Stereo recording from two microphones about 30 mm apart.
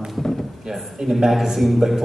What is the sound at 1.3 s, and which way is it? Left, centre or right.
Speech, centre.